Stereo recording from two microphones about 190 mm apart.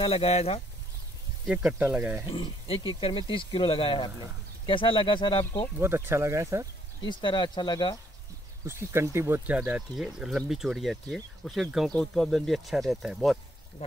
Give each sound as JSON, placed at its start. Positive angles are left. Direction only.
{"t": 0.0, "sound": "speech", "side_deg": 30}
{"t": 1.5, "sound": "speech", "side_deg": -5}
{"t": 2.2, "sound": "speech", "side_deg": 25}
{"t": 5.8, "sound": "speech", "side_deg": -15}
{"t": 7.0, "sound": "speech", "side_deg": 25}
{"t": 8.6, "sound": "speech", "side_deg": -15}